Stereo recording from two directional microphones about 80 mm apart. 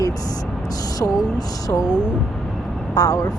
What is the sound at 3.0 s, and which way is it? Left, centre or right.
Speech, left.